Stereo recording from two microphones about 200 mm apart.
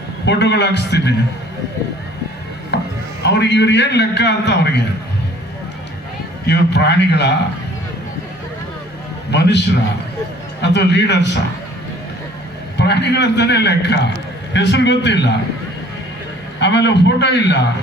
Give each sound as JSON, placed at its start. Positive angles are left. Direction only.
{"t": 0.3, "sound": "a man's voice", "side_deg": 60}
{"t": 2.7, "sound": "chopping", "side_deg": 55}
{"t": 3.2, "sound": "a man's voice", "side_deg": 60}
{"t": 6.5, "sound": "a man's voice", "side_deg": 60}
{"t": 9.3, "sound": "a man's voice", "side_deg": 60}
{"t": 12.7, "sound": "a man's voice", "side_deg": 60}
{"t": 16.6, "sound": "a man's voice", "side_deg": 60}